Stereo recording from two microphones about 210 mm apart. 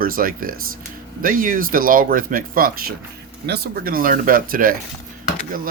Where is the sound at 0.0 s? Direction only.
40° right (ahead or behind).